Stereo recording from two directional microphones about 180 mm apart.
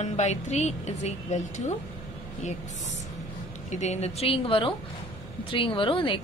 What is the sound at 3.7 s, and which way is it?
A woman's voice, 40° left (ahead or behind).